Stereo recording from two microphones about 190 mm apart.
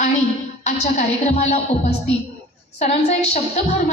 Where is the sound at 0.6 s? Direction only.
35° left (ahead or behind).